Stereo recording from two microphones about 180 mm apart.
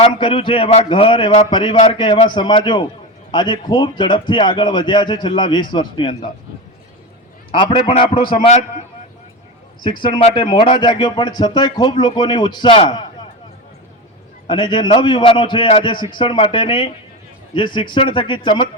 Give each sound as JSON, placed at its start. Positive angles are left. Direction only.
{"t": 0.0, "sound": "a man's voice", "side_deg": 30}
{"t": 7.5, "sound": "a man's voice", "side_deg": 25}
{"t": 10.0, "sound": "a man's voice", "side_deg": 30}
{"t": 14.4, "sound": "a man's voice", "side_deg": 25}